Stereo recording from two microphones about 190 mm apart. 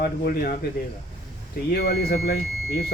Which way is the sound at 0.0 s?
50° left (ahead or behind).